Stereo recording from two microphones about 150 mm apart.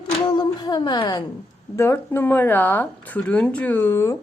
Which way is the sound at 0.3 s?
30° left (ahead or behind).